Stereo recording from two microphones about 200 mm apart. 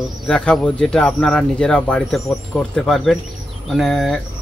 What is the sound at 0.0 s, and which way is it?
Speech, centre (ahead or behind).